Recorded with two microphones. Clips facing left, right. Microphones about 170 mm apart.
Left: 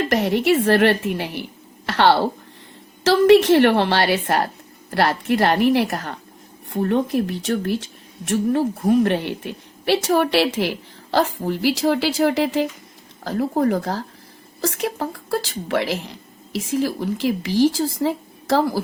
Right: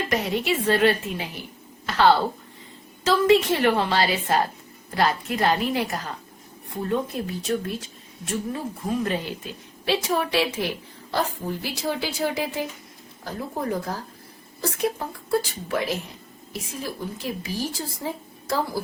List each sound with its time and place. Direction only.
0.1 s a woman's voice: 70° left (ahead or behind); by 18.8 s 85° left